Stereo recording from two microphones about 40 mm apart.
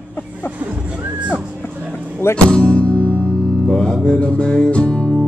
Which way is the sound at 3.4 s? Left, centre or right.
Centre.